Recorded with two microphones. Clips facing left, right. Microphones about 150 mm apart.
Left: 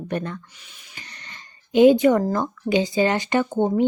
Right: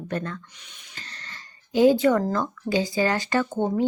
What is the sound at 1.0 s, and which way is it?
Speech, 15° left (ahead or behind).